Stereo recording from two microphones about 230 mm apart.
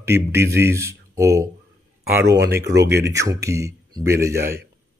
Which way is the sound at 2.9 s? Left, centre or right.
Centre.